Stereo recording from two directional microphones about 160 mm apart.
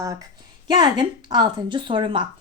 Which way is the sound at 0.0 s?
20° right (ahead or behind).